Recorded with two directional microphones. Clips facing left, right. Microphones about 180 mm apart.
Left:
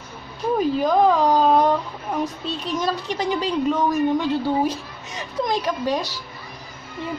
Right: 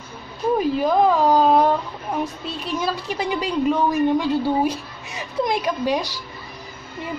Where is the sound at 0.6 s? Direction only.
5° right (ahead or behind).